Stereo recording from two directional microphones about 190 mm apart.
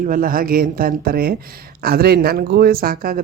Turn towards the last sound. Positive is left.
turn(degrees=-50)  # may be behind; listen again after turning